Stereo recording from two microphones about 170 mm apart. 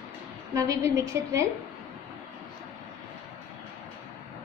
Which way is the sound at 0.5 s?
20° right (ahead or behind).